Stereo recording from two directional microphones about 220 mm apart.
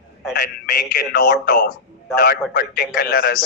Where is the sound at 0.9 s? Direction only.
45° left (ahead or behind).